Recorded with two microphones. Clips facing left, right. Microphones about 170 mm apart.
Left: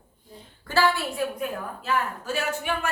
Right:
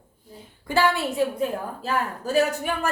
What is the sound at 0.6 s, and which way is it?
Speech, 20° right (ahead or behind).